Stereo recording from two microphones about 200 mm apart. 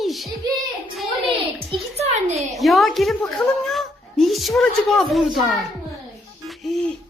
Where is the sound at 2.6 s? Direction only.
Centre (ahead or behind).